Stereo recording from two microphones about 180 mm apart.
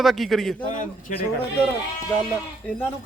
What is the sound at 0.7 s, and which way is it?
Speech, 45° left (ahead or behind).